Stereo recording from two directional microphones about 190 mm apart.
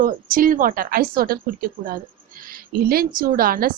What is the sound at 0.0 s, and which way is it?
A woman's voice, 45° right (ahead or behind).